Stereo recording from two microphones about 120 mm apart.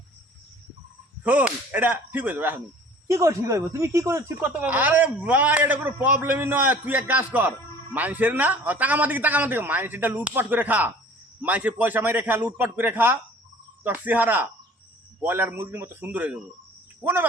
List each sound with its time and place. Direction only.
1.2 s speech: 15° right (ahead or behind)